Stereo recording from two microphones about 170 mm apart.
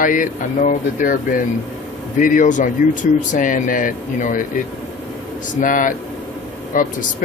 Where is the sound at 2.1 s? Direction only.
50° left (ahead or behind).